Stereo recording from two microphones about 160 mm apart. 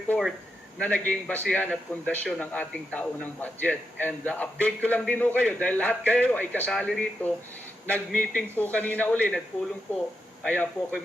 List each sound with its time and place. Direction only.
0.8 s a man's voice: 10° left (ahead or behind)
10.4 s a man's voice: 5° left (ahead or behind)